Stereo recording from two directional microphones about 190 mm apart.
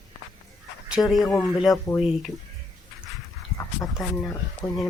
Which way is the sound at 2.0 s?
5° right (ahead or behind).